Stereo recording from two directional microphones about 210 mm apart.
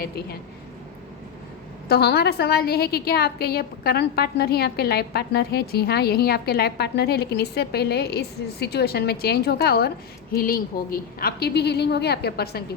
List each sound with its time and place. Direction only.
1.9 s a woman's voice: 50° left (ahead or behind)